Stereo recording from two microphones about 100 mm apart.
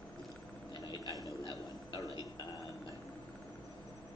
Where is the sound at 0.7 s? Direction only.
45° left (ahead or behind).